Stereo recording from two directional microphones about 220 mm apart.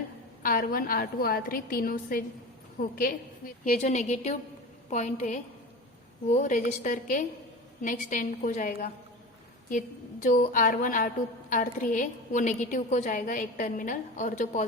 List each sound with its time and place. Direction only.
0.4 s a woman's voice: 40° left (ahead or behind)
10.2 s a woman's voice: 35° left (ahead or behind)